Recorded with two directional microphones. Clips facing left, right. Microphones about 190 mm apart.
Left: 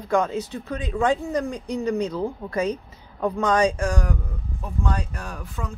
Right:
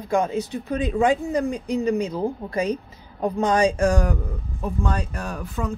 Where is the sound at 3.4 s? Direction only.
30° right (ahead or behind).